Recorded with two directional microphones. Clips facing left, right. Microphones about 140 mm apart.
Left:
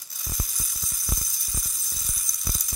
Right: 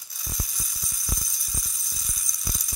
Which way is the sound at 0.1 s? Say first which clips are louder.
Even; centre (ahead or behind).